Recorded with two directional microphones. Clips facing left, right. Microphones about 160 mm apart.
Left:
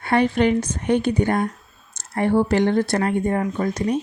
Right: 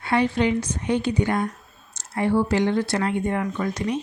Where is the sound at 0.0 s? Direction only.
55° left (ahead or behind).